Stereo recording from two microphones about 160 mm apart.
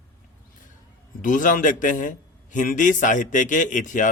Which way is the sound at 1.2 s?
55° left (ahead or behind).